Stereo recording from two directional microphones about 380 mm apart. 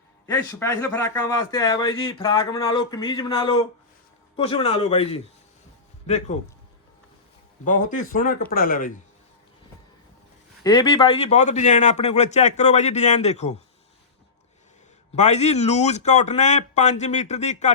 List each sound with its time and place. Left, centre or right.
0.3 s speech: centre
7.6 s a man's voice: centre
10.6 s speech: centre
15.1 s speech: centre